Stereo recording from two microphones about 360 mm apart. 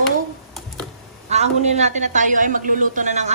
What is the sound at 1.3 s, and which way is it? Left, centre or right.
A woman's voice, centre.